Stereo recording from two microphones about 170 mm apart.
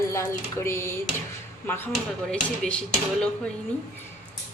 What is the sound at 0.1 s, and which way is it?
Speech, 15° left (ahead or behind).